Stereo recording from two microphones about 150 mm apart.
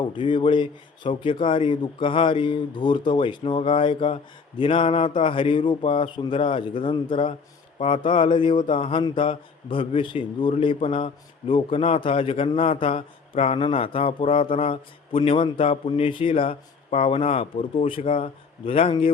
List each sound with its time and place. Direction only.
0.0 s speech: 30° left (ahead or behind)